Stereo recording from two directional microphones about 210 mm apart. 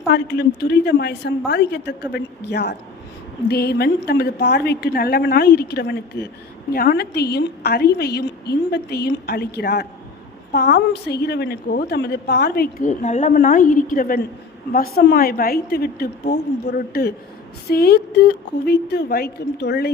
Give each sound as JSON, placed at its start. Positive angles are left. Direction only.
{"t": 0.1, "sound": "a woman's voice", "side_deg": 50}